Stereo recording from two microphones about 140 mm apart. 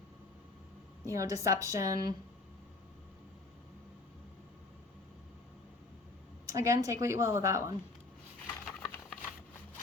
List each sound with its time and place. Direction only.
1.0 s a woman's voice: 20° right (ahead or behind)
6.4 s a woman's voice: 25° right (ahead or behind)
8.6 s a sound: centre (ahead or behind)